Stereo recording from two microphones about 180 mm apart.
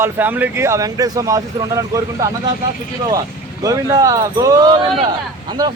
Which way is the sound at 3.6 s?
20° right (ahead or behind).